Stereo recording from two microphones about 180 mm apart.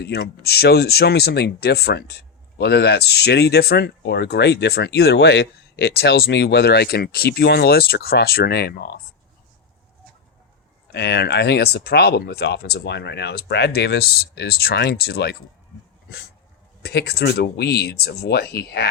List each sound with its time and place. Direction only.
0.0 s speech: 65° left (ahead or behind)
10.9 s speech: 65° left (ahead or behind)
16.8 s speech: 65° left (ahead or behind)